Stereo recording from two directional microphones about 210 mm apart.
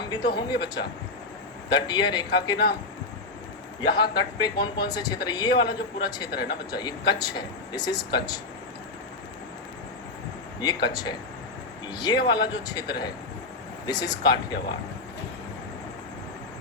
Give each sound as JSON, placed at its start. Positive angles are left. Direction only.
{"t": 0.1, "sound": "speech", "side_deg": 20}
{"t": 3.8, "sound": "speech", "side_deg": 20}
{"t": 10.6, "sound": "speech", "side_deg": 20}